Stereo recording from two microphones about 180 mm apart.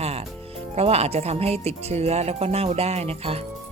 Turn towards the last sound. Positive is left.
turn(degrees=-35)  # may be behind; listen again after turning